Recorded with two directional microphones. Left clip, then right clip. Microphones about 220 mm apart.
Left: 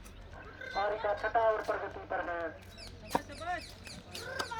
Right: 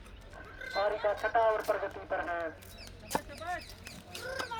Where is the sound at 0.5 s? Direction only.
50° right (ahead or behind).